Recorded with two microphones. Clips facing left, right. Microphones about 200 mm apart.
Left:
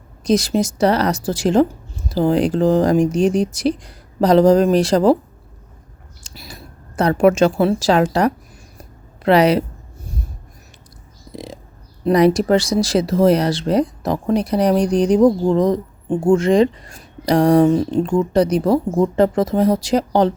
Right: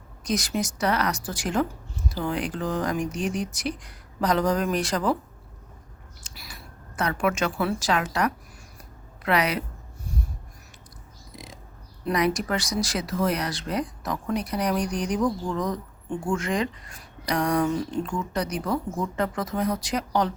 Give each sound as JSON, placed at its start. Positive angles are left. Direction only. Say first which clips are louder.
{"t": 0.3, "sound": "speech", "louder": "left 10 dB", "side_deg": 30}
{"t": 6.2, "sound": "speech", "louder": "left 8 dB", "side_deg": 25}
{"t": 11.3, "sound": "a sound", "louder": "left 12 dB", "side_deg": 30}
{"t": 12.0, "sound": "speech", "louder": "left 11 dB", "side_deg": 30}